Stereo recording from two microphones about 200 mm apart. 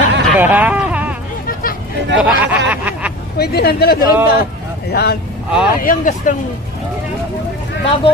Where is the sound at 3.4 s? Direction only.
50° left (ahead or behind).